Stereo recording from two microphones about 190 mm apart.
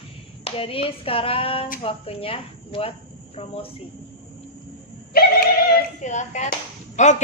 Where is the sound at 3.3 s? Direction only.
30° left (ahead or behind).